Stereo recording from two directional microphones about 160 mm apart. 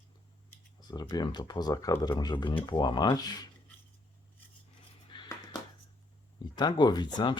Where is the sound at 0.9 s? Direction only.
25° left (ahead or behind).